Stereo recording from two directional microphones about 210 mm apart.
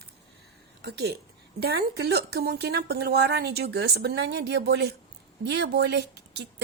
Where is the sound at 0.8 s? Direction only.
50° right (ahead or behind).